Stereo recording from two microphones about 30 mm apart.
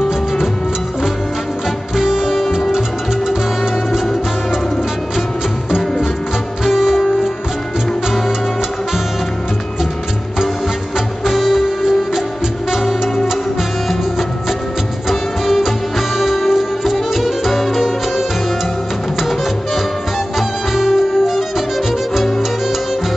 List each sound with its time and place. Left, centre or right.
2.0 s music: centre
6.6 s music: centre
11.2 s music: centre
15.0 s music: centre
20.3 s music: centre